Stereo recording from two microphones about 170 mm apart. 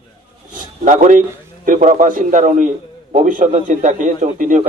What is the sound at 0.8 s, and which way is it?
A man's voice, 50° right (ahead or behind).